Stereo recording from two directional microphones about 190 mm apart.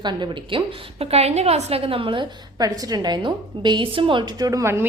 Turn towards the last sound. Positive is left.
turn(degrees=-15)  # may be behind; listen again after turning